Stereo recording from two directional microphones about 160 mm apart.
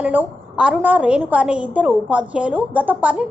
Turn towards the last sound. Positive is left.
turn(degrees=-10)  # may be behind; listen again after turning